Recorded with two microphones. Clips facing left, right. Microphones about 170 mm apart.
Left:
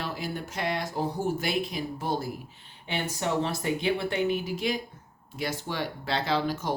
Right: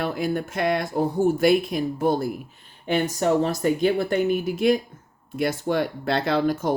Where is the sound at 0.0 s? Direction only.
50° right (ahead or behind).